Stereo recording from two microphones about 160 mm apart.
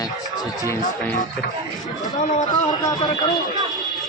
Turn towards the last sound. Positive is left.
turn(degrees=25)  # may be behind; listen again after turning